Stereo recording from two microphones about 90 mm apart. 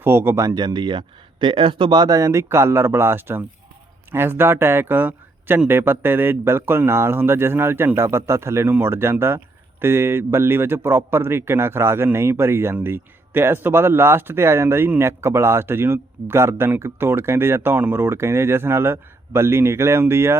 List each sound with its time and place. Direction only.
0.0 s speech: 25° right (ahead or behind)
0.4 s speech: 50° right (ahead or behind); by 20.4 s 30° right (ahead or behind)